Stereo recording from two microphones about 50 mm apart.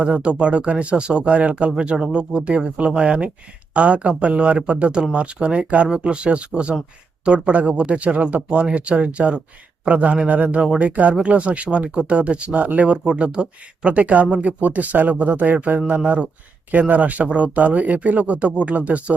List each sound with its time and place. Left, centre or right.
0.0 s speech: right